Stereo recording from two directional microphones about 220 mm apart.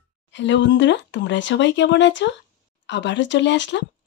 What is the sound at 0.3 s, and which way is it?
Speech, 55° left (ahead or behind).